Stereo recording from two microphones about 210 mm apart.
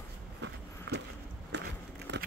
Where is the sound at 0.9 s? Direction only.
50° right (ahead or behind).